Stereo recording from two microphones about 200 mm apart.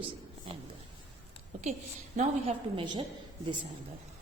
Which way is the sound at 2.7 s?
25° right (ahead or behind).